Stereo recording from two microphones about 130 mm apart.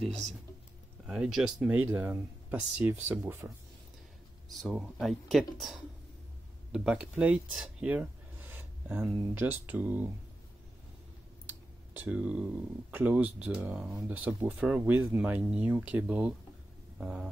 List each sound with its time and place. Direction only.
0.0 s speech: centre (ahead or behind); by 3.5 s 20° right (ahead or behind)
4.5 s speech: centre (ahead or behind)
7.9 s a sound: 15° right (ahead or behind)
9.2 s speech: 15° right (ahead or behind)
12.0 s speech: 10° right (ahead or behind)